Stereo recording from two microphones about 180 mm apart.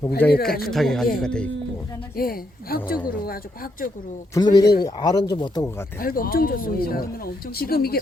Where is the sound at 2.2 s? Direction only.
55° left (ahead or behind).